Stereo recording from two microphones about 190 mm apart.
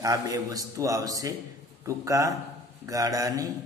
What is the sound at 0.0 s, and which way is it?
A man's voice, 20° right (ahead or behind).